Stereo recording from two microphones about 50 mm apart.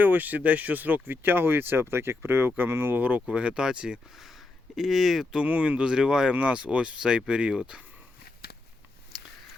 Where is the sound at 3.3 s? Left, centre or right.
Centre.